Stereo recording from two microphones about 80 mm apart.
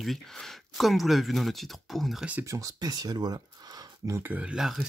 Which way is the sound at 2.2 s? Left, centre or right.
Centre.